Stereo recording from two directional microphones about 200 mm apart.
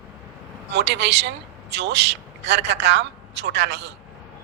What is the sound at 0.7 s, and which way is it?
Speech, 60° right (ahead or behind).